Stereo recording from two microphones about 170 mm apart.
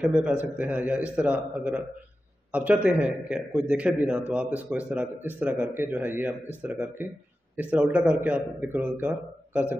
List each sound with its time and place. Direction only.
0.0 s a man's voice: 10° right (ahead or behind)